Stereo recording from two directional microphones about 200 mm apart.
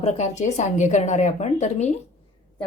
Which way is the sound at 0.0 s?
35° left (ahead or behind).